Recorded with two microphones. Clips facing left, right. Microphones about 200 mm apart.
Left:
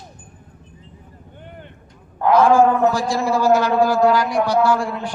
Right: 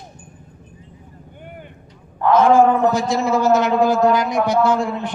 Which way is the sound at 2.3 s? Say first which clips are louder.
Right 1 dB; 20° right (ahead or behind).